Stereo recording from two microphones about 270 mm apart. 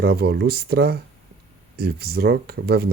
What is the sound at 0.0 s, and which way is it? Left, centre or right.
Speech, right.